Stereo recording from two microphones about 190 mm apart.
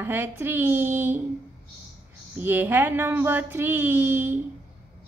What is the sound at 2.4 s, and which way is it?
A woman's voice, 10° right (ahead or behind).